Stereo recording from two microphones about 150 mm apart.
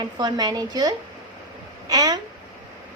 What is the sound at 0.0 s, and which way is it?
A woman's voice, 30° right (ahead or behind).